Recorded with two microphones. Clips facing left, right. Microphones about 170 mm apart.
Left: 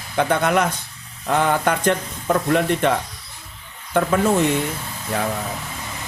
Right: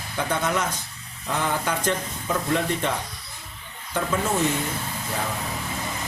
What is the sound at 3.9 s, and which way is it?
Speech, 60° left (ahead or behind).